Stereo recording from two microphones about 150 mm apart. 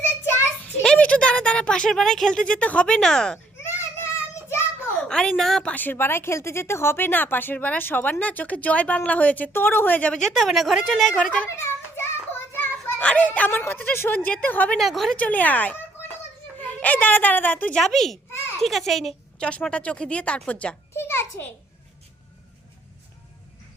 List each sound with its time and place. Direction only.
0.0 s child singing: 15° left (ahead or behind)
0.8 s speech: 5° left (ahead or behind)
3.8 s child singing: 20° left (ahead or behind)
4.9 s a woman's voice: 5° left (ahead or behind)
5.7 s a child's voice: 15° left (ahead or behind)
11.4 s children playing: 15° left (ahead or behind)
12.5 s a child's voice: 10° left (ahead or behind)
14.8 s a woman's voice: centre (ahead or behind)
17.7 s a child's voice: centre (ahead or behind)